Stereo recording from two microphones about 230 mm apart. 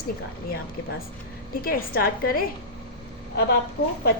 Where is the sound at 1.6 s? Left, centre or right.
Left.